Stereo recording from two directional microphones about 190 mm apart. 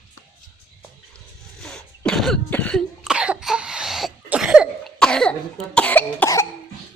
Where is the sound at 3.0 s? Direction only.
5° right (ahead or behind); by 6.5 s 10° left (ahead or behind).